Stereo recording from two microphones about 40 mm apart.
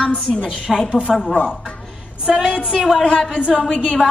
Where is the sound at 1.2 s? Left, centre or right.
Left.